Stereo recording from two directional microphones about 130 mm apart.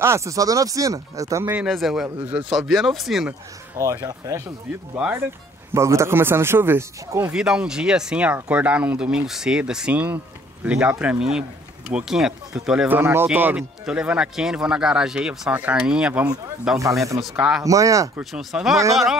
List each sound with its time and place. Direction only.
0.0 s speech: 20° right (ahead or behind)
1.7 s speech: centre (ahead or behind)
2.0 s speech: 10° right (ahead or behind)
3.7 s speech: 25° right (ahead or behind)
4.9 s speech: 10° right (ahead or behind)
5.7 s speech: 20° right (ahead or behind)
7.3 s speech: 5° right (ahead or behind)
17.6 s speech: 25° right (ahead or behind)
18.3 s speech: centre (ahead or behind)